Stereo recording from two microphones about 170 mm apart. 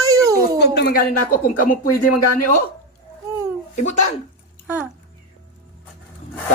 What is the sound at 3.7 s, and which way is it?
Speech, 40° left (ahead or behind).